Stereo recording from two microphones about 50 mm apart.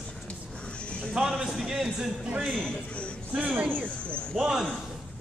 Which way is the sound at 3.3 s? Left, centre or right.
Right.